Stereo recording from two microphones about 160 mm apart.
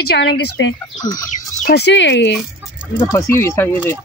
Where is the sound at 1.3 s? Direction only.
50° left (ahead or behind).